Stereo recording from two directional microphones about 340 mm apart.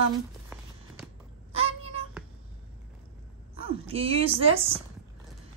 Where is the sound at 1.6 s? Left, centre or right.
Centre.